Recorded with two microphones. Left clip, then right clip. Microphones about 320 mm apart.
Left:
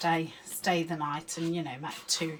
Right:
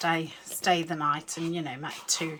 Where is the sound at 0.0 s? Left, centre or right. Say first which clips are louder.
Right 1 dB; centre.